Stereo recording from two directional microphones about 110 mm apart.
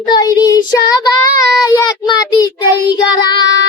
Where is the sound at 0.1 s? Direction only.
35° left (ahead or behind).